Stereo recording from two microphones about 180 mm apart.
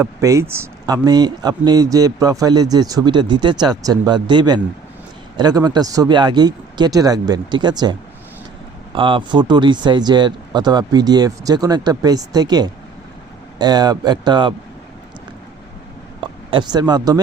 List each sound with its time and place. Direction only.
0.0 s speech: 15° right (ahead or behind)
9.0 s speech: 30° right (ahead or behind)
16.2 s speech: 30° right (ahead or behind)